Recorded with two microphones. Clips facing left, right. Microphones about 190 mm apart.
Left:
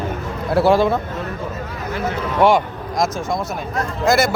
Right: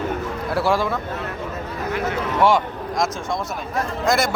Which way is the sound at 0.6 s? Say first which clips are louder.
Left 7 dB; 25° left (ahead or behind).